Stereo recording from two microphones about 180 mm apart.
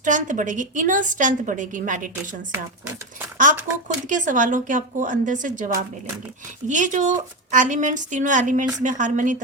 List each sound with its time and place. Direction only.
0.0 s a woman's voice: 45° right (ahead or behind)
3.8 s a woman's voice: 45° right (ahead or behind)